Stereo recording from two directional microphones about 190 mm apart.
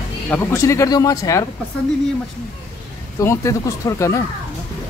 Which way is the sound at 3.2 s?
15° left (ahead or behind).